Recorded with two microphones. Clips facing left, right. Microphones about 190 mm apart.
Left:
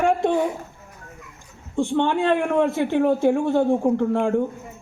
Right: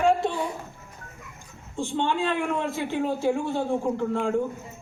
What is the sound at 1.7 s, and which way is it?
Speech, 60° left (ahead or behind).